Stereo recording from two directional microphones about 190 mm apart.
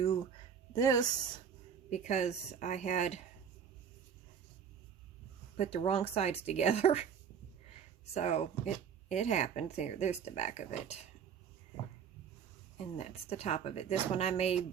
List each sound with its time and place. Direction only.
0.7 s a woman's voice: 20° left (ahead or behind)
1.9 s speech: 35° left (ahead or behind)
5.5 s speech: 30° left (ahead or behind)
12.8 s speech: 35° left (ahead or behind)